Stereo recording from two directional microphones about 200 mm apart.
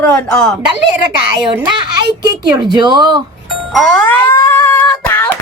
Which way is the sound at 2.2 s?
20° right (ahead or behind).